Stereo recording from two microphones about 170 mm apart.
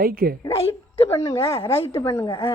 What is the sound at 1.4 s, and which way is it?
Speech, 35° left (ahead or behind).